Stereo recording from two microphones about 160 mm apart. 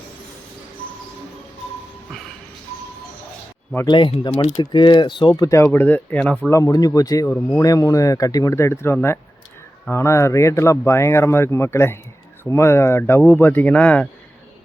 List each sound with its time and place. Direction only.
3.8 s speech: 30° left (ahead or behind)
5.4 s speech: 20° left (ahead or behind)
6.5 s speech: 20° left (ahead or behind)
7.3 s speech: 10° left (ahead or behind)
7.6 s speech: 20° left (ahead or behind)